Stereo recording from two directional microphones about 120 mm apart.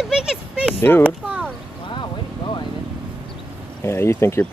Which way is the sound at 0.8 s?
20° left (ahead or behind).